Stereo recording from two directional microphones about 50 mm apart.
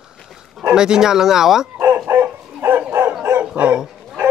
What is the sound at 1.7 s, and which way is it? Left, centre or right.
Dog, right.